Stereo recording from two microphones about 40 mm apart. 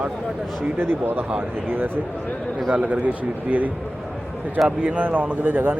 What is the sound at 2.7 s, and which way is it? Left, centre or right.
A man's voice, right.